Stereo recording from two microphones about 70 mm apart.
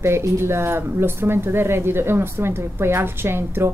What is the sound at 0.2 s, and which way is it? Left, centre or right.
Speech, right.